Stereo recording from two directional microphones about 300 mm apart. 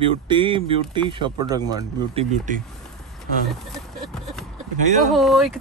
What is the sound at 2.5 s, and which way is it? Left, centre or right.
Speech, right.